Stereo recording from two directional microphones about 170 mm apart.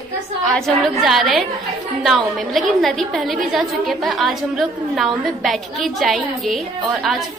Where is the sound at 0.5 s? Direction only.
Centre (ahead or behind).